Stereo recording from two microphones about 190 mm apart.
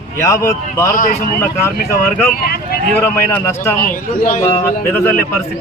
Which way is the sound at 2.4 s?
55° left (ahead or behind).